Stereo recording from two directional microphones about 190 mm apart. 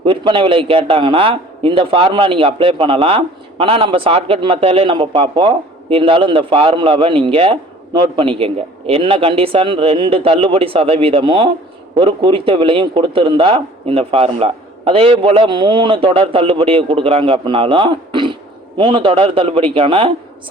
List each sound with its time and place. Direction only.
0.0 s a man's voice: 25° right (ahead or behind)